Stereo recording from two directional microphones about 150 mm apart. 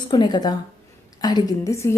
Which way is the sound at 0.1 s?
30° left (ahead or behind).